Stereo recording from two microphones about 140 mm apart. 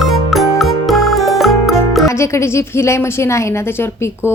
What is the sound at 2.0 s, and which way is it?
A woman's voice, 20° left (ahead or behind).